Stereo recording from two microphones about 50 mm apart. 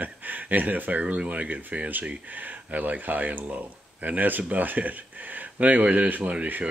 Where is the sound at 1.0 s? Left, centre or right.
Right.